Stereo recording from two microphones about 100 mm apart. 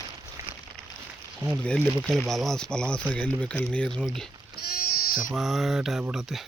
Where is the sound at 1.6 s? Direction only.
10° left (ahead or behind).